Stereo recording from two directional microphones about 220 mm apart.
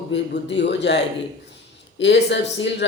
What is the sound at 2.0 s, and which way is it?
Speech, 55° left (ahead or behind).